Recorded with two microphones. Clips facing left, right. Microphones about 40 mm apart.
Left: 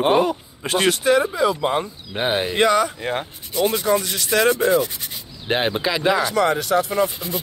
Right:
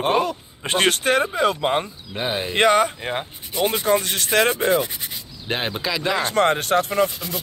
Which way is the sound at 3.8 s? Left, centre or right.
Right.